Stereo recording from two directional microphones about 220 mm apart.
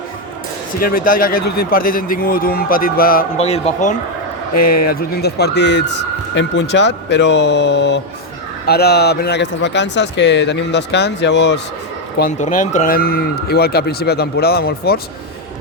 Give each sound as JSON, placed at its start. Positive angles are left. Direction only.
{"t": 0.8, "sound": "speech", "side_deg": 40}
{"t": 4.5, "sound": "a man's voice", "side_deg": 45}
{"t": 12.2, "sound": "a man's voice", "side_deg": 35}